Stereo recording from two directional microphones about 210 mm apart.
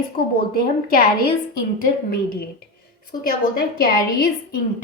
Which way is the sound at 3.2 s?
45° left (ahead or behind).